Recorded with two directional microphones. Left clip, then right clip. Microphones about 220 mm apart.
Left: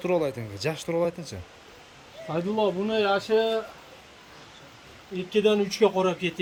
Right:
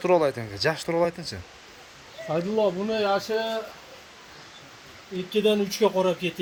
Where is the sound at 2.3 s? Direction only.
45° right (ahead or behind).